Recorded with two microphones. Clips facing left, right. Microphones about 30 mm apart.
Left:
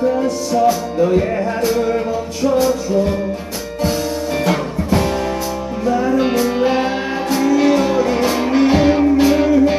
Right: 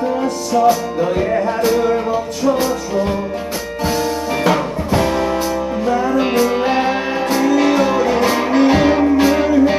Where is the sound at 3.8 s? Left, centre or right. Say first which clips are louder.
Even; right.